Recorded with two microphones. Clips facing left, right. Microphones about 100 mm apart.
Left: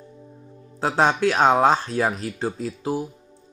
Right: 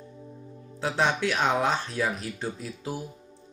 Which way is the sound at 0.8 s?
40° left (ahead or behind).